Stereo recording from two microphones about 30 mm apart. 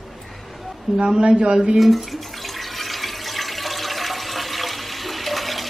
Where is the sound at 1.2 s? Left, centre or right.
Right.